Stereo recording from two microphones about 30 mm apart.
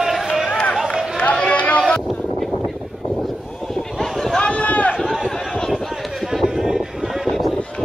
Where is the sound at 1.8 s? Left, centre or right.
Centre.